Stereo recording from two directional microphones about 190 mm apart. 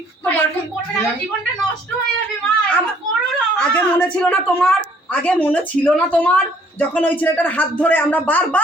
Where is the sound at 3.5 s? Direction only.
5° left (ahead or behind).